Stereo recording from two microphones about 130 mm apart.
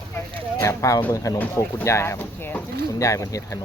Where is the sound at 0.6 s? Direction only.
25° left (ahead or behind).